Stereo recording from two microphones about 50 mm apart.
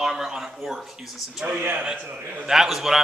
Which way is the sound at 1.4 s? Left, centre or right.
Right.